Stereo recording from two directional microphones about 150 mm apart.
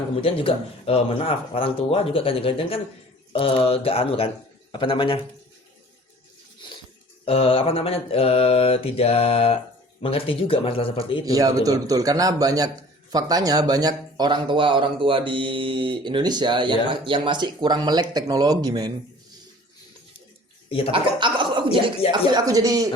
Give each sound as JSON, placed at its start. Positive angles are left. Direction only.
{"t": 0.2, "sound": "speech", "side_deg": 40}
{"t": 7.3, "sound": "speech", "side_deg": 40}
{"t": 11.3, "sound": "a man's voice", "side_deg": -25}
{"t": 20.7, "sound": "speech", "side_deg": 40}
{"t": 20.9, "sound": "chuckle", "side_deg": -30}
{"t": 22.4, "sound": "a man's voice", "side_deg": -25}